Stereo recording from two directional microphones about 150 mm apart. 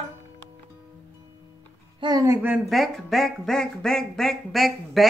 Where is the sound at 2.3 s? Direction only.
5° right (ahead or behind).